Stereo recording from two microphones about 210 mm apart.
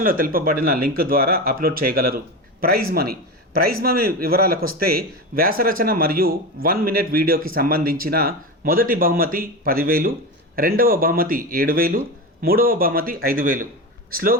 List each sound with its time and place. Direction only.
0.0 s speech: 45° right (ahead or behind)